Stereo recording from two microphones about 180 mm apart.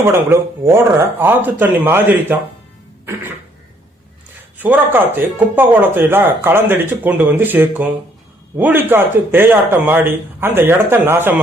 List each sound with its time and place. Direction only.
0.0 s speech: 15° right (ahead or behind)
4.5 s speech: 10° right (ahead or behind)